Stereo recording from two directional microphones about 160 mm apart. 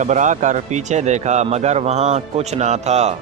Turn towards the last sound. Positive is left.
turn(degrees=-45)  # may be behind; listen again after turning